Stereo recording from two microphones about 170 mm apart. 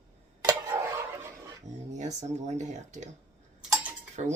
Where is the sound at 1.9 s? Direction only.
45° right (ahead or behind).